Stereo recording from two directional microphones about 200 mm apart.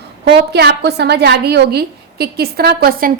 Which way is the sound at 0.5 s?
55° right (ahead or behind).